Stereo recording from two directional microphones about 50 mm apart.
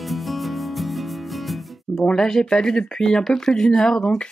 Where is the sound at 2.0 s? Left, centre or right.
Centre.